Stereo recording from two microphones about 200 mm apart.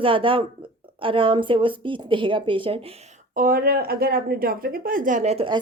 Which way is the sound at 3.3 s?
45° right (ahead or behind).